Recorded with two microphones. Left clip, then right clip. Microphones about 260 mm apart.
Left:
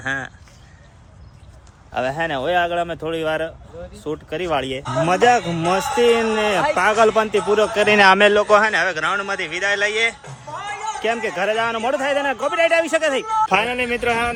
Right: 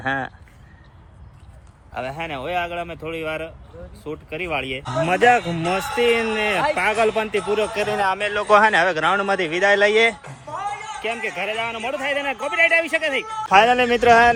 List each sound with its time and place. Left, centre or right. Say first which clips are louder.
0.0 s speech: right 1 dB; centre
1.9 s a man's voice: left 6 dB; centre
4.1 s speech: left 4 dB; left
4.9 s a man's voice: left 1 dB; centre
5.5 s speech: left 3 dB; left
6.0 s a man's voice: left 2 dB; centre
7.9 s speech: left 10 dB; left
8.3 s a man's voice: left 1 dB; centre
11.0 s a man's voice: left 5 dB; centre
13.5 s speech: right 4 dB; centre